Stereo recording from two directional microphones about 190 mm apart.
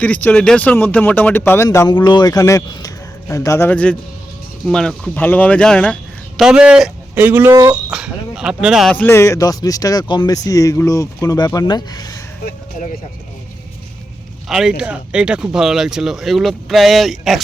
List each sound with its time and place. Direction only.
0.0 s speech: 5° left (ahead or behind); by 7.8 s 15° right (ahead or behind)
7.9 s speech: 5° right (ahead or behind); by 12.2 s 20° left (ahead or behind)
14.4 s speech: centre (ahead or behind)